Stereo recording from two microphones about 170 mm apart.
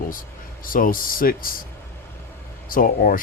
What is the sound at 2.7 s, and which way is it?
Speech, 55° left (ahead or behind).